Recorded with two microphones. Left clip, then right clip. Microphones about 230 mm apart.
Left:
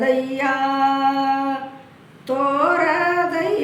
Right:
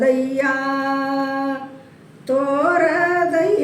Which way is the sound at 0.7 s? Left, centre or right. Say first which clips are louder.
Left 3 dB; left.